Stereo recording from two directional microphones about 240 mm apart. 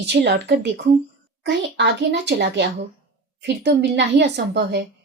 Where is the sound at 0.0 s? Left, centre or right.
Right.